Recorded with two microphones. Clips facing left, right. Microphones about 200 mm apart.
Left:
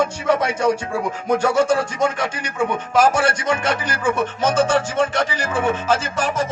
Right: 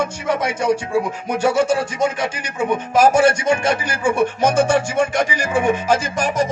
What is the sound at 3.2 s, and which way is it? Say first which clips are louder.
Speech: right 4 dB; 10° right (ahead or behind).